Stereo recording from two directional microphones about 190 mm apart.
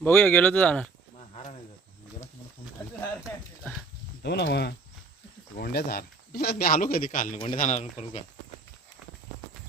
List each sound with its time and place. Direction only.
0.0 s speech: 10° left (ahead or behind)
4.2 s a man's voice: 60° left (ahead or behind); by 7.3 s 45° left (ahead or behind)
7.3 s a man's voice: 30° left (ahead or behind)